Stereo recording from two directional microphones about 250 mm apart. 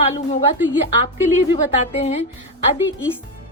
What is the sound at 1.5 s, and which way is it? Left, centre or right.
Speech, left.